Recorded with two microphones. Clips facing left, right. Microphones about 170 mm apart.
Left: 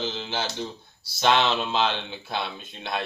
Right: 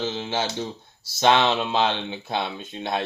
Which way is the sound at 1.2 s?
20° right (ahead or behind).